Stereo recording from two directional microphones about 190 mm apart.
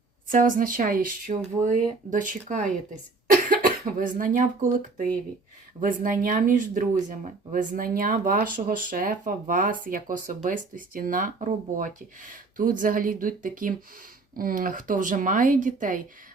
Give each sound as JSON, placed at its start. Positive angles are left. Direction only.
{"t": 0.3, "sound": "speech", "side_deg": -45}